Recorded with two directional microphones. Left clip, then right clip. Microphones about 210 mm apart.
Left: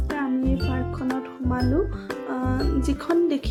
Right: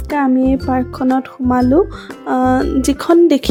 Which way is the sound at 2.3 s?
40° right (ahead or behind).